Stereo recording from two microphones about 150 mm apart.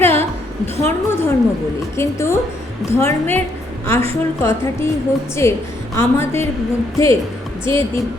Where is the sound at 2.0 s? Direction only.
15° left (ahead or behind).